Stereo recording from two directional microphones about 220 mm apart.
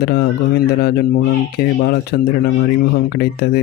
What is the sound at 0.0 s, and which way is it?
Speech, 45° left (ahead or behind).